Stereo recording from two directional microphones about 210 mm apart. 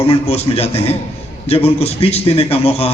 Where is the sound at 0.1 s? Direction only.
30° left (ahead or behind).